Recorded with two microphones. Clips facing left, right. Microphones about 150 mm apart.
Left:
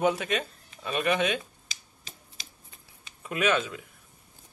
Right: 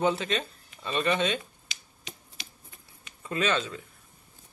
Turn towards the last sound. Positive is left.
turn(degrees=10)  # may be behind; listen again after turning